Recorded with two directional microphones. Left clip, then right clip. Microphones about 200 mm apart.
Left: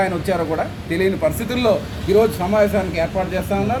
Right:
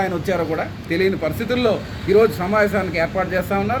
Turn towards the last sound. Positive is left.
turn(degrees=0)  # may be behind; listen again after turning